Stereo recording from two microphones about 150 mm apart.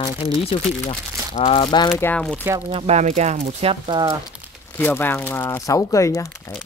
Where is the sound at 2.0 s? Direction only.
10° left (ahead or behind).